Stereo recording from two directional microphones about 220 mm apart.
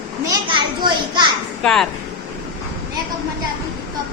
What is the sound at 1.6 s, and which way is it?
Speech, centre (ahead or behind).